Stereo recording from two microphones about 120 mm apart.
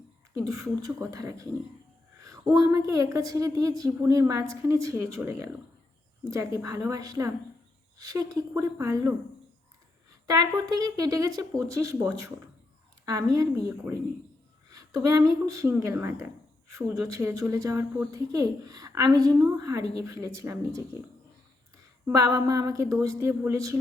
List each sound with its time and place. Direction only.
0.3 s a woman's voice: 30° right (ahead or behind)
10.2 s a woman's voice: 30° right (ahead or behind)
22.0 s a woman's voice: 30° right (ahead or behind)